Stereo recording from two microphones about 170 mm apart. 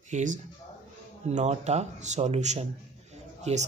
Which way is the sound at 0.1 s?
50° right (ahead or behind).